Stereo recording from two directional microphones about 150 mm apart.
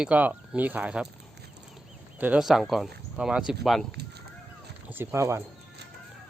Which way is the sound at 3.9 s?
90° right.